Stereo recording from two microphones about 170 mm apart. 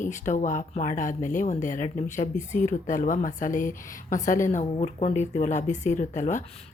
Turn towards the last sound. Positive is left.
turn(degrees=45)  # may be behind; listen again after turning